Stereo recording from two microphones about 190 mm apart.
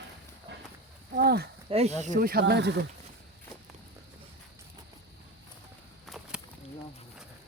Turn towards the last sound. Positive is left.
turn(degrees=0)  # may be behind; listen again after turning